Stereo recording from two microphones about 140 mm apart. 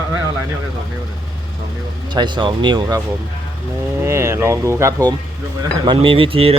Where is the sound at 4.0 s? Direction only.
20° right (ahead or behind).